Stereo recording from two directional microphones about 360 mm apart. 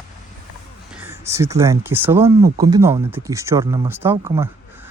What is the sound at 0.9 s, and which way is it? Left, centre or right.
Speech, centre.